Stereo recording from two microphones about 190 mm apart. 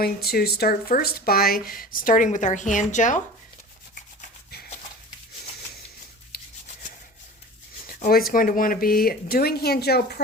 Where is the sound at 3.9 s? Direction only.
45° left (ahead or behind).